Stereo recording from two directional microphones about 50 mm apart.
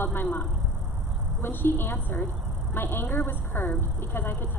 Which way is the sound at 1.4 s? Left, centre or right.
Left.